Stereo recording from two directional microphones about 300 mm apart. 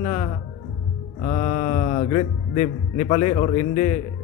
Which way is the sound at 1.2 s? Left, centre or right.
Left.